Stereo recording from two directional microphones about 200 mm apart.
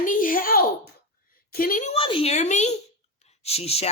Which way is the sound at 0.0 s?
45° left (ahead or behind).